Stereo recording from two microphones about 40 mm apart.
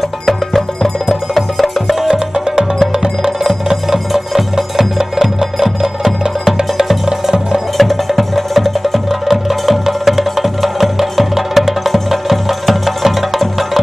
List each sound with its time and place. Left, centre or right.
0.3 s music: centre
2.0 s music: centre
7.7 s music: centre